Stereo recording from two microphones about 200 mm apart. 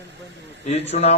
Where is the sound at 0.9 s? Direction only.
30° left (ahead or behind).